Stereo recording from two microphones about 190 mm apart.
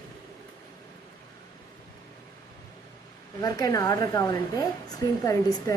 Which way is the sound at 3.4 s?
20° left (ahead or behind).